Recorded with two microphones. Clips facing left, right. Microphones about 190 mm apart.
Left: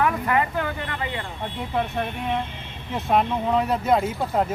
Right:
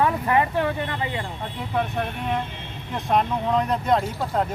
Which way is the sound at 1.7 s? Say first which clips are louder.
Right 1 dB; 5° left (ahead or behind).